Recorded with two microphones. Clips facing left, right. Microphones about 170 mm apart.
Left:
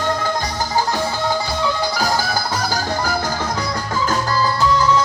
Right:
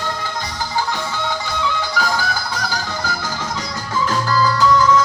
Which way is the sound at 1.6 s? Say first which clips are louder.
Even; 40° left (ahead or behind).